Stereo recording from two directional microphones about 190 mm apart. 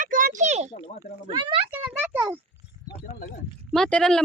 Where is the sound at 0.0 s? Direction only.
45° right (ahead or behind).